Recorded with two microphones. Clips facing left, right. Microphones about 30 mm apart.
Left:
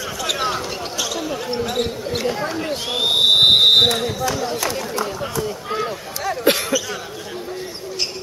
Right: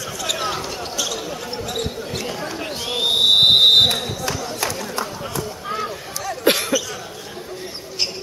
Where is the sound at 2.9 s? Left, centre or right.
Centre.